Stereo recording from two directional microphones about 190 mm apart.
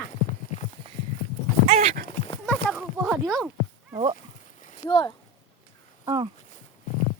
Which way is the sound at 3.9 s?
25° right (ahead or behind).